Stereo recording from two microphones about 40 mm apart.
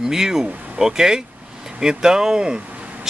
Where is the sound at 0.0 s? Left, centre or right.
Centre.